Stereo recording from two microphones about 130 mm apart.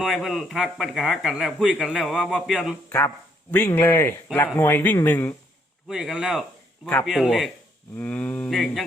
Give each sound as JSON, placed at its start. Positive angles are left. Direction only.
{"t": 0.0, "sound": "a man's voice", "side_deg": 0}
{"t": 3.5, "sound": "speech", "side_deg": 15}
{"t": 5.9, "sound": "a man's voice", "side_deg": -5}
{"t": 7.9, "sound": "speech", "side_deg": 10}